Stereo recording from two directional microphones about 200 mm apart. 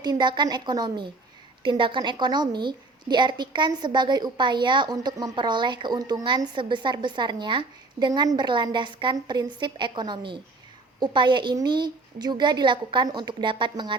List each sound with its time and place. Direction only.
0.0 s a woman's voice: 20° right (ahead or behind)